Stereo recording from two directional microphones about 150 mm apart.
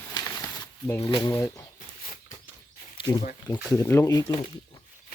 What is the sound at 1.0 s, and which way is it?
Speech, 35° left (ahead or behind).